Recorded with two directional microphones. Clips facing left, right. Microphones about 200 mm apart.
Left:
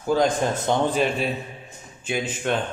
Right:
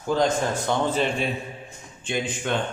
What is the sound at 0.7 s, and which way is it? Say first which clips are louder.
Speech: left 3 dB; 20° left (ahead or behind).